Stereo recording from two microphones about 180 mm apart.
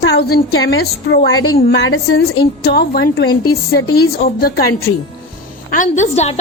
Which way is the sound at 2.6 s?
60° left (ahead or behind).